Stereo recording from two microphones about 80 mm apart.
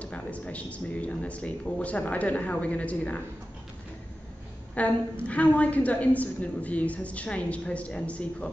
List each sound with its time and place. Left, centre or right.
0.0 s a woman's voice: centre
4.7 s a woman's voice: centre